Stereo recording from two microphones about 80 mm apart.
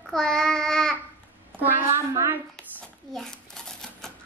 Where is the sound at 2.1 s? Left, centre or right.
Right.